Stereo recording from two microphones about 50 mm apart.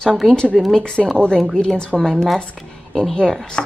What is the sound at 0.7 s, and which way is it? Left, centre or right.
A woman's voice, centre.